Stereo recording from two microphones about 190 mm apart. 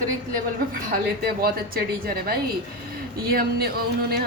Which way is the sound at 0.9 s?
50° right (ahead or behind).